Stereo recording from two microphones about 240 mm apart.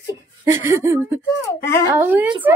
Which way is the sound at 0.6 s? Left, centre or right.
Centre.